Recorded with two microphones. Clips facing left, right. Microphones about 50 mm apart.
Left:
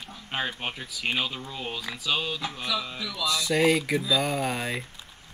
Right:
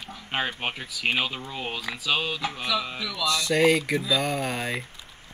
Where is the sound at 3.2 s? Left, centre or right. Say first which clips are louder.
Right 2 dB; centre.